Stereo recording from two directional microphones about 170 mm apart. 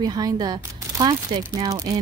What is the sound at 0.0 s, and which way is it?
Speech, 25° right (ahead or behind).